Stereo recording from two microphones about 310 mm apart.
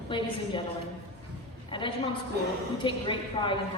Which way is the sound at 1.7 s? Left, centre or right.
Centre.